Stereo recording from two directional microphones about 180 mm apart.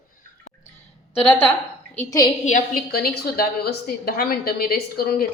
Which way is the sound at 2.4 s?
50° left (ahead or behind).